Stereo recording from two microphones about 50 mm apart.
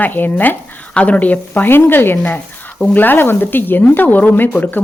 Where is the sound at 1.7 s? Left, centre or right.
Left.